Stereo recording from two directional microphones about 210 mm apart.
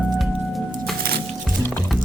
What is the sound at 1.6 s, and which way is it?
Music, 5° left (ahead or behind).